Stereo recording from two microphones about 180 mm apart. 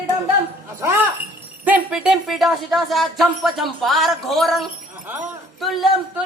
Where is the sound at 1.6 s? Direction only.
5° right (ahead or behind).